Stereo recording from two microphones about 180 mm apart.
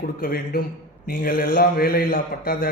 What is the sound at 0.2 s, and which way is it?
A man's voice, 55° left (ahead or behind).